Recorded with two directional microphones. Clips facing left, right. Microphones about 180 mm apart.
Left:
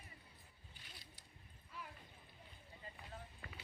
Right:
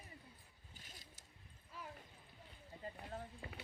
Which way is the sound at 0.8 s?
45° right (ahead or behind).